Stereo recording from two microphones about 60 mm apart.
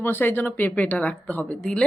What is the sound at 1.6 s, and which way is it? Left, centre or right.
Speech, centre.